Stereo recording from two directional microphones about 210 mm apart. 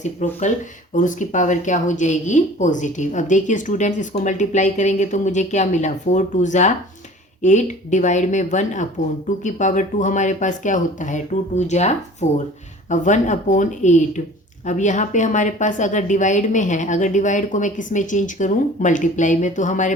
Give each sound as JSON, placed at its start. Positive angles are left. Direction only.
{"t": 0.0, "sound": "a woman's voice", "side_deg": 35}